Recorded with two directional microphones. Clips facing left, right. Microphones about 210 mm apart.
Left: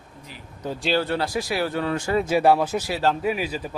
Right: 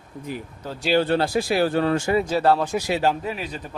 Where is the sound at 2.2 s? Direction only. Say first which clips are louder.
Left 1 dB; 10° left (ahead or behind).